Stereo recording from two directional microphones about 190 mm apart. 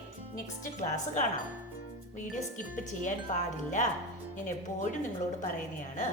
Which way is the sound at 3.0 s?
40° left (ahead or behind).